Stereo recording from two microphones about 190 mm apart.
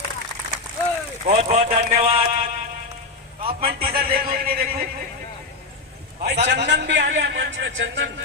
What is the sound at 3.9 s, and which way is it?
Speech, 55° right (ahead or behind).